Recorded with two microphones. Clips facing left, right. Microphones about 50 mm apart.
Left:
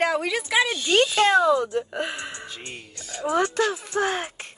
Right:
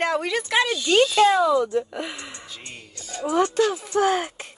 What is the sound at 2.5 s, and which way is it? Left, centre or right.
Speech, left.